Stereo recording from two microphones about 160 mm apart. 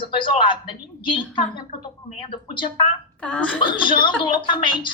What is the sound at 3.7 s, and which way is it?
A woman's voice, 30° left (ahead or behind).